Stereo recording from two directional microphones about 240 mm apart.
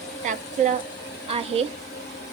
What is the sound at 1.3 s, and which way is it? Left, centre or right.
Speech, right.